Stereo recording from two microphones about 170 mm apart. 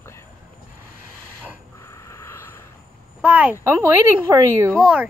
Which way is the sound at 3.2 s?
10° right (ahead or behind).